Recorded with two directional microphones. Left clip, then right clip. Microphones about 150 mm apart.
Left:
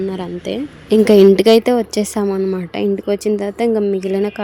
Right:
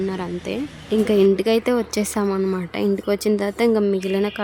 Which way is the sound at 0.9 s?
45° left (ahead or behind).